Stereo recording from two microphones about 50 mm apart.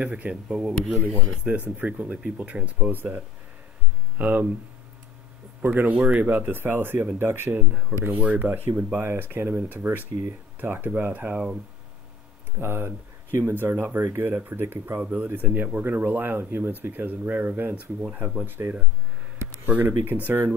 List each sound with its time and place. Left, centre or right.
0.0 s speech: right
0.5 s speech: centre
1.0 s speech: right
2.9 s speech: right
4.2 s speech: right
5.6 s speech: right
12.5 s speech: right
18.1 s speech: right
19.3 s a sound: right
19.6 s speech: right